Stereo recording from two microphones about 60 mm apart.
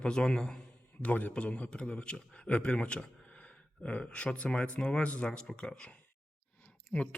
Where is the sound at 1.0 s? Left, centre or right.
Left.